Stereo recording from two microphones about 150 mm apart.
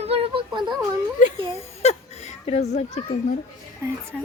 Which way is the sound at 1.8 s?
45° left (ahead or behind).